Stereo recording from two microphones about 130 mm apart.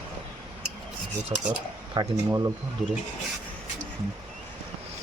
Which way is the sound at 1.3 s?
40° right (ahead or behind).